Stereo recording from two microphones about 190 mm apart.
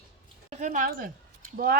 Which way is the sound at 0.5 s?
40° right (ahead or behind).